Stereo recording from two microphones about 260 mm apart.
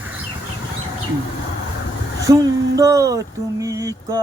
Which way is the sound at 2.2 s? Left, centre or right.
Centre.